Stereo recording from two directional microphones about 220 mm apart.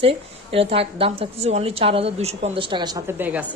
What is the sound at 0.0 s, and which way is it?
A woman's voice, 25° right (ahead or behind).